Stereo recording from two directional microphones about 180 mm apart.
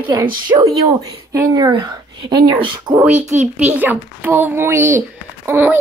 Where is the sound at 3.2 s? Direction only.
40° right (ahead or behind).